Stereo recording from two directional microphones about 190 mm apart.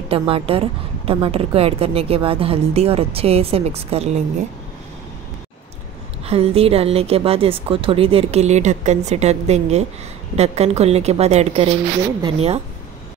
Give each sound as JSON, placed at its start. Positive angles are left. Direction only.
{"t": 0.1, "sound": "a woman's voice", "side_deg": -30}
{"t": 6.2, "sound": "a woman's voice", "side_deg": -30}